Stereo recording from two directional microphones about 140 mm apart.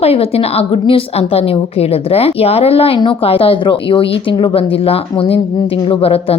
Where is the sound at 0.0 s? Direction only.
45° left (ahead or behind).